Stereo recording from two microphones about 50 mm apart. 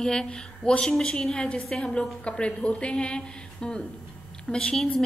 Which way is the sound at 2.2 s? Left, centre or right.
Left.